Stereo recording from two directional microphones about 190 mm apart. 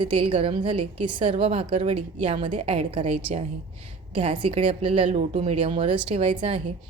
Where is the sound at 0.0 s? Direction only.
25° right (ahead or behind).